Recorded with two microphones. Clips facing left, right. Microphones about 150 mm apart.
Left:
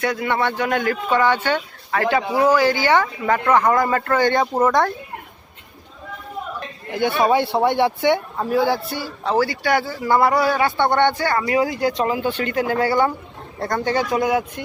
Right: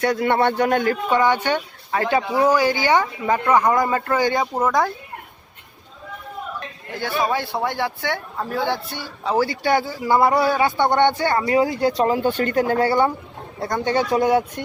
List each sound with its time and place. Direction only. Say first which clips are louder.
0.0 s a man's voice: right 3 dB; 40° right (ahead or behind)
1.1 s a man's voice: left 1 dB; 15° right (ahead or behind)
6.9 s a man's voice: left 5 dB; 20° left (ahead or behind)
8.4 s a man's voice: left 5 dB; 5° left (ahead or behind)
9.4 s speech: right 1 dB; 25° right (ahead or behind)
13.6 s speech: even; 15° right (ahead or behind)
14.2 s a man's voice: right 2 dB; 35° right (ahead or behind)